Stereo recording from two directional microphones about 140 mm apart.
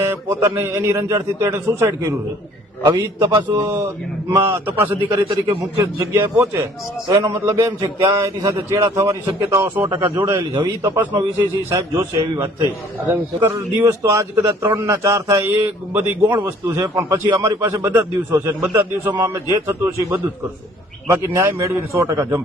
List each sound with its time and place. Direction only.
0.1 s a man's voice: 15° right (ahead or behind)
10.5 s a man's voice: 30° right (ahead or behind)
11.3 s a man's voice: 20° right (ahead or behind)